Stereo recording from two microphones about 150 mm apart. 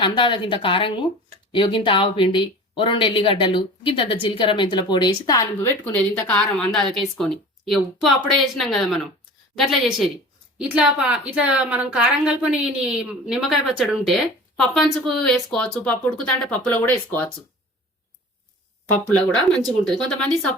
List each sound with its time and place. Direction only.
0.0 s a woman's voice: 35° left (ahead or behind); by 17.3 s 10° left (ahead or behind)
19.0 s a woman's voice: 5° left (ahead or behind)